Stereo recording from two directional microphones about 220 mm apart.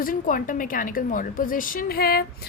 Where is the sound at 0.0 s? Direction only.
40° left (ahead or behind).